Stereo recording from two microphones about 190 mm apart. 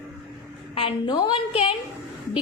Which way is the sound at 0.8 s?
25° left (ahead or behind).